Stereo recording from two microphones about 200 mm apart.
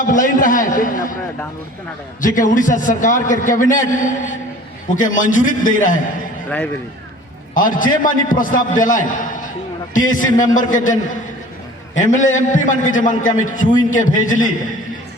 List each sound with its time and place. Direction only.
0.0 s a man's voice: 40° left (ahead or behind)
2.2 s a man's voice: 40° left (ahead or behind)
7.5 s a man's voice: 40° left (ahead or behind)
12.2 s a man's voice: 40° left (ahead or behind)